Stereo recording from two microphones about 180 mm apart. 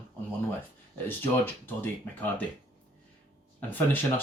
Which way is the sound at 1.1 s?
10° left (ahead or behind).